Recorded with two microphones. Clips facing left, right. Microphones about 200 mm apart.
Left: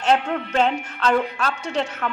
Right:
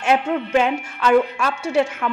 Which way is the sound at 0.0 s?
10° right (ahead or behind).